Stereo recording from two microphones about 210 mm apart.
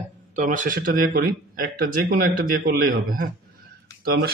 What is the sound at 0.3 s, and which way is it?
Speech, 35° right (ahead or behind).